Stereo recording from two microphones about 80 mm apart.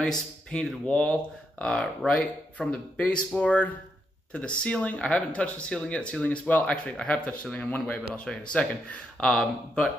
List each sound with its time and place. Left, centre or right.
0.5 s speech: centre
9.3 s speech: centre